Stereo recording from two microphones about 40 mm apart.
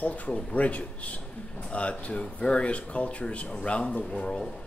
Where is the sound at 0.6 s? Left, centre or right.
Left.